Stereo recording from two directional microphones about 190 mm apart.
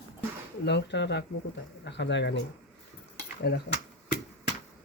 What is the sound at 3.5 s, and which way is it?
Speech, 60° left (ahead or behind).